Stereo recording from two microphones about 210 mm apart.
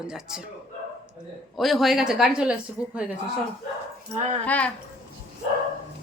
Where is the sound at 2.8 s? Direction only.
15° left (ahead or behind).